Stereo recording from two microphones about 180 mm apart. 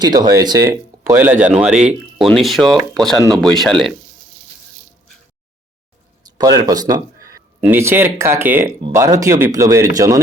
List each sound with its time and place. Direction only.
0.0 s speech: 20° right (ahead or behind); by 3.9 s centre (ahead or behind)
6.2 s a man's voice: 20° right (ahead or behind)